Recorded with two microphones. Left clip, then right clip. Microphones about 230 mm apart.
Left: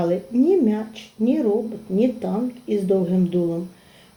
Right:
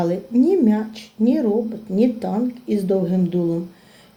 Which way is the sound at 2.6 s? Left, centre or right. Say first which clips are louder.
Left 1 dB; right.